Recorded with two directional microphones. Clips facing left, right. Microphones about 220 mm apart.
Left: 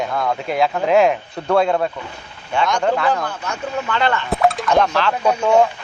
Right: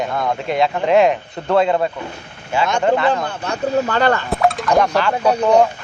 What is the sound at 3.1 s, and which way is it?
Speech, 25° right (ahead or behind).